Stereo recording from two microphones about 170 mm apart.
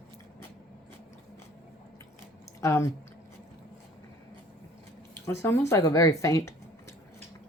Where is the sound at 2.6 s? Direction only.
15° left (ahead or behind).